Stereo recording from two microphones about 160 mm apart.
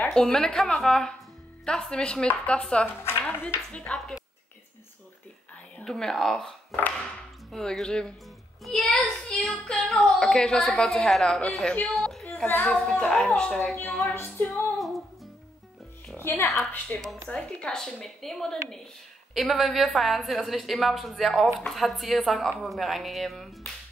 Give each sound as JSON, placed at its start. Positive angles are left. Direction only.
{"t": 0.0, "sound": "a woman's voice", "side_deg": 5}
{"t": 5.8, "sound": "a woman's voice", "side_deg": 5}
{"t": 14.5, "sound": "music", "side_deg": 0}
{"t": 16.2, "sound": "a woman's voice", "side_deg": 10}